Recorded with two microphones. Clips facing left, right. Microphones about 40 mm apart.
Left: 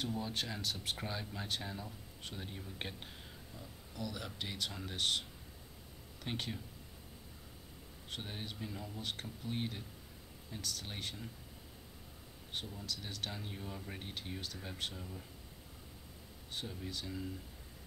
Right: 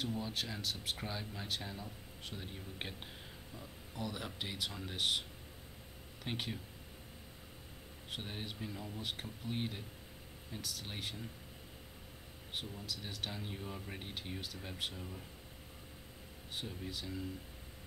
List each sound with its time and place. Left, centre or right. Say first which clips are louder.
0.0 s speech: even; centre
3.9 s speech: right 1 dB; right
4.5 s speech: even; centre
6.2 s speech: even; centre
8.1 s speech: right 1 dB; centre
12.5 s speech: even; centre
16.5 s speech: even; centre